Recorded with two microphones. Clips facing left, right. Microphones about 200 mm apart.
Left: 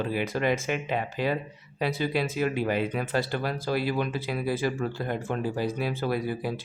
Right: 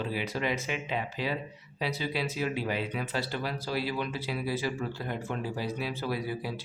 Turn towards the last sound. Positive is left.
turn(degrees=50)  # may be behind; listen again after turning